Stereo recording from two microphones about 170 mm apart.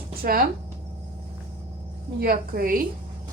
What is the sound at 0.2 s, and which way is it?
Speech, 60° right (ahead or behind).